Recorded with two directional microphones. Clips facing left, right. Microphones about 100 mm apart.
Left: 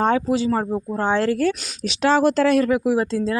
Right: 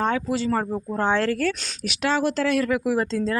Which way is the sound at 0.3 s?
15° left (ahead or behind).